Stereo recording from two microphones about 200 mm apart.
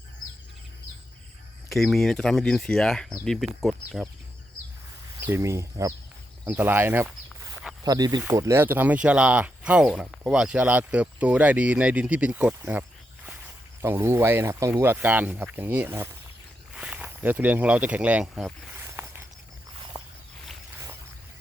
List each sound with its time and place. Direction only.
1.7 s speech: centre (ahead or behind)
5.2 s speech: 15° right (ahead or behind)
6.4 s a sound: 10° right (ahead or behind)
7.9 s speech: 20° right (ahead or behind); by 18.8 s centre (ahead or behind)
18.8 s a sound: 10° right (ahead or behind)
19.9 s walk: 25° right (ahead or behind)